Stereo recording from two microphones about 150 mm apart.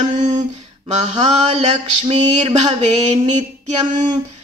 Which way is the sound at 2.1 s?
45° right (ahead or behind).